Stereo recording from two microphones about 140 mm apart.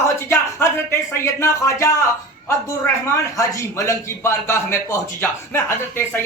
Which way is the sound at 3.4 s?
20° left (ahead or behind).